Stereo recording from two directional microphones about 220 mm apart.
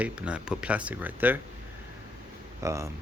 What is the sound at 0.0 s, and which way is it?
Speech, 5° right (ahead or behind).